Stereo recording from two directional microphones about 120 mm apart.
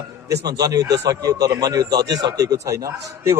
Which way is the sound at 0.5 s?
35° right (ahead or behind).